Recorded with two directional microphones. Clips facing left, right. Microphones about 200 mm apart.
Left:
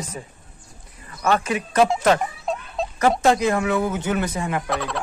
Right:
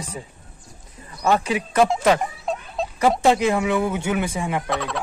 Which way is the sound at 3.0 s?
15° right (ahead or behind).